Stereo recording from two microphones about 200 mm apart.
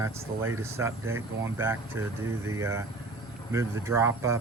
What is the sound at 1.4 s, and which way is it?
Speech, 10° right (ahead or behind).